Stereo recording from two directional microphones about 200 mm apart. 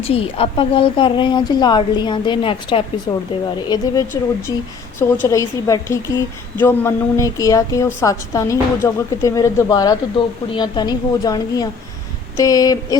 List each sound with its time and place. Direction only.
0.0 s a woman's voice: 30° left (ahead or behind)